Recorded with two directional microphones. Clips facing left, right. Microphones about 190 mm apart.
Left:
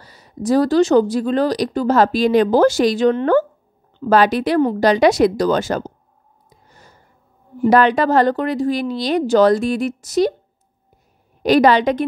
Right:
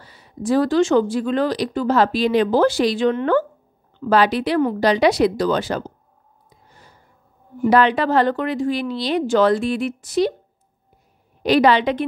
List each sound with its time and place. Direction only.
0.0 s a woman's voice: 40° left (ahead or behind)
6.7 s a sound: 45° left (ahead or behind)
7.6 s a woman's voice: 45° left (ahead or behind)
11.4 s a woman's voice: 45° left (ahead or behind)